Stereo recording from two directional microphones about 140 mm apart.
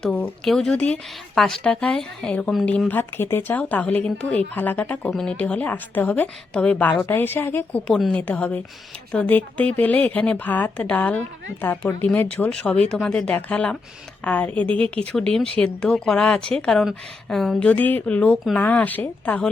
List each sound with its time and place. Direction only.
0.0 s speech: 5° left (ahead or behind)